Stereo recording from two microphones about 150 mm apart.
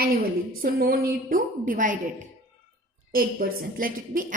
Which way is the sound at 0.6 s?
80° right.